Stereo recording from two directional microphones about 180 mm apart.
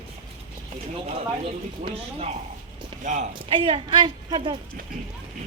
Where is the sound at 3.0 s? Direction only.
40° right (ahead or behind).